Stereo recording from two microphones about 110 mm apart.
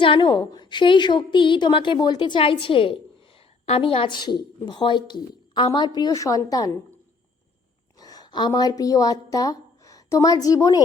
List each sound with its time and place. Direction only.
0.0 s a woman's voice: 50° left (ahead or behind)
7.9 s a woman's voice: 35° left (ahead or behind)